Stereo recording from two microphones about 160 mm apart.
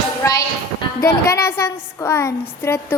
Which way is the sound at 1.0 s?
15° left (ahead or behind).